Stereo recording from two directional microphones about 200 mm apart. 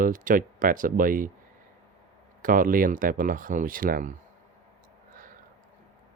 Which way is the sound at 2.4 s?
45° right (ahead or behind).